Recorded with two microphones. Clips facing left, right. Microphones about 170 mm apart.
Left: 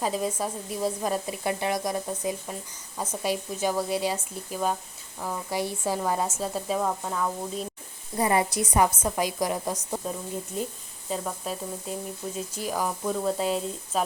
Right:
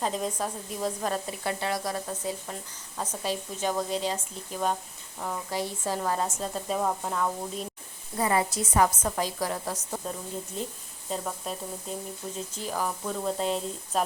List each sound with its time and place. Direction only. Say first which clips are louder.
0.0 s speech: left 2 dB; 5° left (ahead or behind)
8.2 s speech: left 2 dB; 20° left (ahead or behind); by 14.0 s 5° left (ahead or behind)